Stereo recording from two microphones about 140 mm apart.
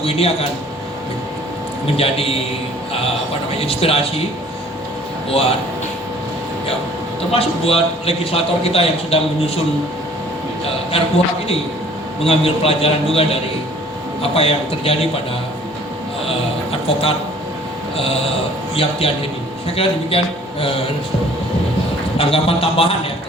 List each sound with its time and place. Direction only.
0.0 s a man's voice: 45° left (ahead or behind)
2.0 s a man's voice: 45° left (ahead or behind)
3.5 s a man's voice: 45° left (ahead or behind)
7.3 s a man's voice: 45° left (ahead or behind)
10.9 s a man's voice: 45° left (ahead or behind)
12.2 s a man's voice: 45° left (ahead or behind)
16.8 s a man's voice: 45° left (ahead or behind)
17.9 s mantra: 45° left (ahead or behind)
18.8 s a man's voice: 40° left (ahead or behind)
22.2 s a man's voice: 40° left (ahead or behind)